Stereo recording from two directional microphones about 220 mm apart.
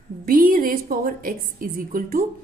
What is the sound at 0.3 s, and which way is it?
A woman's voice, 40° right (ahead or behind).